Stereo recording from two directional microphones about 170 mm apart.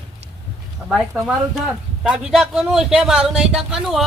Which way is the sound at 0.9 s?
Centre (ahead or behind).